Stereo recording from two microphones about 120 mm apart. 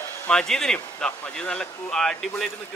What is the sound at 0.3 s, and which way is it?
Speech, 5° left (ahead or behind).